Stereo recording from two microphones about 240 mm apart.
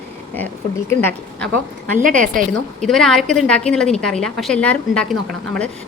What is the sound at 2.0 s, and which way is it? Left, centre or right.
Speech, right.